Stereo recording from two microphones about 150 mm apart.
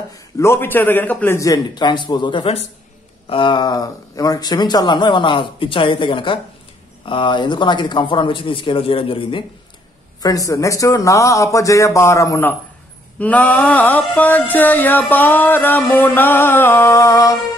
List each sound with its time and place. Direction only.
0.1 s a man's voice: 15° left (ahead or behind); by 9.4 s 35° left (ahead or behind)
10.2 s a man's voice: 20° left (ahead or behind)
13.2 s music: 10° left (ahead or behind)